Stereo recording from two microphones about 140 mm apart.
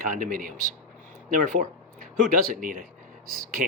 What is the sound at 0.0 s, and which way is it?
Speech, 80° right.